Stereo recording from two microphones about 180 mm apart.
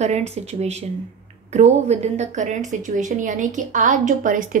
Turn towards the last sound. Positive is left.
turn(degrees=-45)  # may be behind; listen again after turning